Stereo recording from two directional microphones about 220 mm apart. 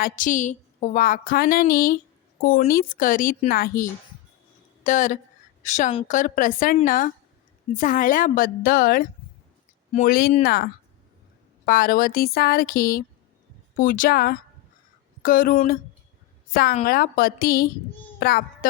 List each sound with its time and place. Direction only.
0.0 s a woman's voice: 35° left (ahead or behind)
18.2 s music: 45° left (ahead or behind)